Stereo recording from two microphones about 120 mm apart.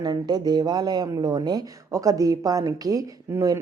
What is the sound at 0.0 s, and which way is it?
Speech, 35° right (ahead or behind).